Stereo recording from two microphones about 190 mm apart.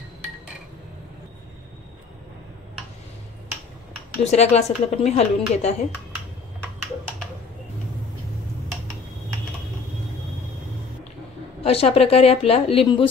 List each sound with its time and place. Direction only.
4.2 s a woman's voice: 35° left (ahead or behind)
11.6 s a woman's voice: 30° left (ahead or behind)